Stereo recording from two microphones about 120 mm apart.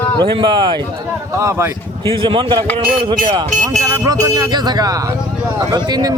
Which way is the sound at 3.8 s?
30° right (ahead or behind).